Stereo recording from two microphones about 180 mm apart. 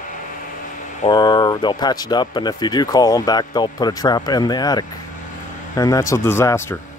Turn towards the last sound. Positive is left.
turn(degrees=15)  # may be behind; listen again after turning